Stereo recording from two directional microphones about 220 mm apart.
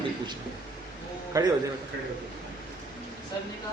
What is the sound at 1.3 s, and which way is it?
Speech, 15° right (ahead or behind).